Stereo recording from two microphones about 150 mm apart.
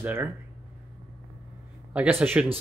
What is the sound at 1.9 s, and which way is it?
Speech, 10° right (ahead or behind).